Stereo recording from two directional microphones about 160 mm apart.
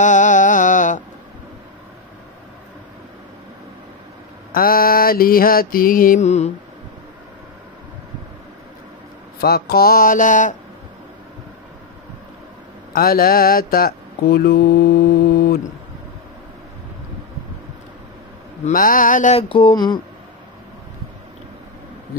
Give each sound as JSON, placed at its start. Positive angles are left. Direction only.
{"t": 0.0, "sound": "mantra", "side_deg": 50}
{"t": 4.5, "sound": "mantra", "side_deg": 65}
{"t": 9.4, "sound": "mantra", "side_deg": 75}
{"t": 12.9, "sound": "speech", "side_deg": 65}
{"t": 18.7, "sound": "mantra", "side_deg": 60}
{"t": 19.3, "sound": "speech", "side_deg": 35}